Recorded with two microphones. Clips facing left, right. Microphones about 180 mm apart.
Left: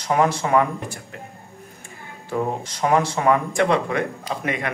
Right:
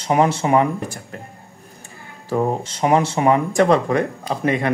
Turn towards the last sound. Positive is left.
turn(degrees=-35)  # may be behind; listen again after turning